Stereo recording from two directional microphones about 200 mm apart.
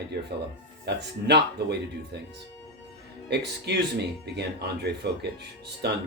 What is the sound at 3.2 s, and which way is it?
Speech, 55° right (ahead or behind).